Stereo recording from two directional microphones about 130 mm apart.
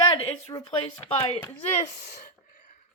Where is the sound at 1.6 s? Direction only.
60° left (ahead or behind).